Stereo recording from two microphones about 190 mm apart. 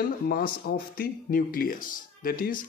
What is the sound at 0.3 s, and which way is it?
Speech, 50° left (ahead or behind).